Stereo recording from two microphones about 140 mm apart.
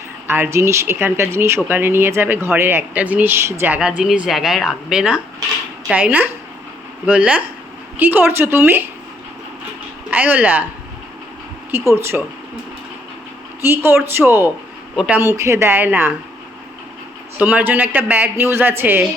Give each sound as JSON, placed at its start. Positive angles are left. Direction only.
{"t": 0.3, "sound": "speech", "side_deg": -15}
{"t": 3.8, "sound": "a woman's voice", "side_deg": -5}
{"t": 10.1, "sound": "speech", "side_deg": -15}
{"t": 11.7, "sound": "speech", "side_deg": -20}
{"t": 13.6, "sound": "speech", "side_deg": -15}
{"t": 15.4, "sound": "speech", "side_deg": -20}
{"t": 17.3, "sound": "speech", "side_deg": -10}